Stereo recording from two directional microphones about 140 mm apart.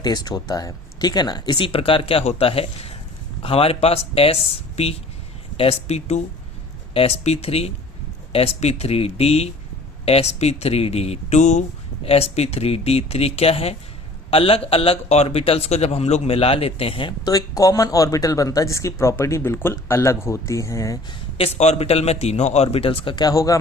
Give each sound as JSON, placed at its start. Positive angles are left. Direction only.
{"t": 0.0, "sound": "a man's voice", "side_deg": 30}
{"t": 5.5, "sound": "a man's voice", "side_deg": 45}
{"t": 12.0, "sound": "a man's voice", "side_deg": 45}
{"t": 21.1, "sound": "a man's voice", "side_deg": 40}